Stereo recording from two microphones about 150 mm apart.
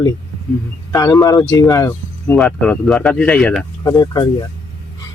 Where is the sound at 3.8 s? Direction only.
25° left (ahead or behind).